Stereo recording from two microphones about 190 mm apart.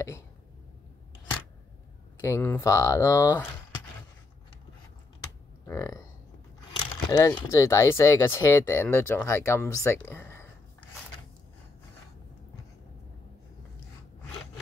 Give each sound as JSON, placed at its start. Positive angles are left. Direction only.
{"t": 2.2, "sound": "speech", "side_deg": 15}
{"t": 5.7, "sound": "speech", "side_deg": 15}
{"t": 7.1, "sound": "speech", "side_deg": 20}